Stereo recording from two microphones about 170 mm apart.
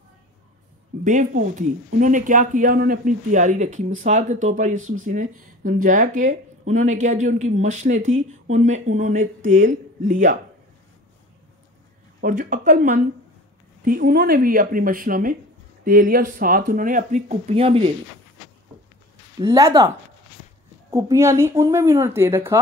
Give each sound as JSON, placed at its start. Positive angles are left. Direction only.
{"t": 1.0, "sound": "speech", "side_deg": -50}
{"t": 12.2, "sound": "speech", "side_deg": -50}
{"t": 19.4, "sound": "a woman's voice", "side_deg": -20}
{"t": 20.9, "sound": "a woman's voice", "side_deg": -20}